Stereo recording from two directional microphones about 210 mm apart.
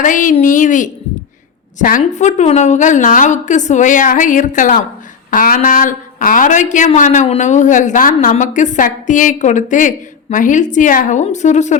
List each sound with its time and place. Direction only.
0.0 s a woman's voice: 40° left (ahead or behind)